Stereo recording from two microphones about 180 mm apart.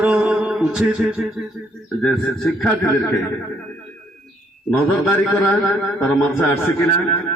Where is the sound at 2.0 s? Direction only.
Centre (ahead or behind).